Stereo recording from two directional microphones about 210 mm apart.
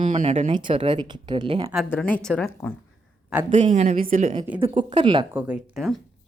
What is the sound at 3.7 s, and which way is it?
Speech, 35° right (ahead or behind).